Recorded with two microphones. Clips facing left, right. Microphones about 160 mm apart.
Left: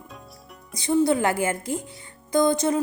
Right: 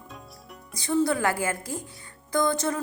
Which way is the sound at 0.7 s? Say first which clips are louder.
Left 4 dB; 20° left (ahead or behind).